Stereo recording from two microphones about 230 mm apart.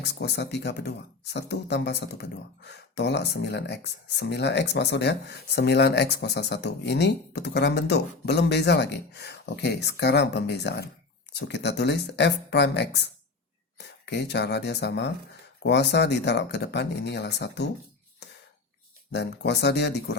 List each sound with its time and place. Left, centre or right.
0.0 s speech: left
19.1 s speech: left